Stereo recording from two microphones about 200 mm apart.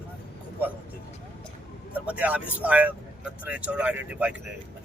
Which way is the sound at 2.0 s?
5° right (ahead or behind).